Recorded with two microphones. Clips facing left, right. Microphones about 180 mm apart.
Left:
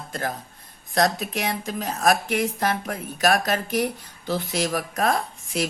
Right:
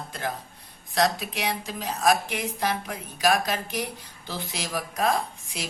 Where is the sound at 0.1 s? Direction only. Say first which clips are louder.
Left 5 dB; 45° left (ahead or behind).